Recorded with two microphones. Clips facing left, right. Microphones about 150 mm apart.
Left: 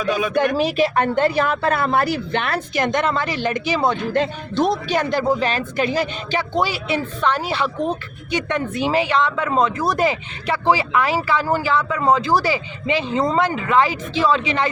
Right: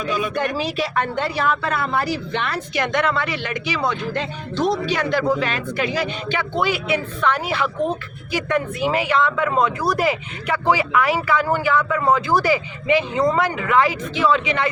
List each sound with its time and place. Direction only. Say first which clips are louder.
0.0 s speech: left 4 dB; 70° left (ahead or behind)
0.9 s a woman's voice: left 5 dB; 45° left (ahead or behind)